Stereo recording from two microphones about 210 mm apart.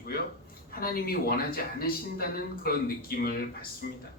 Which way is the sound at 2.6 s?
45° left (ahead or behind).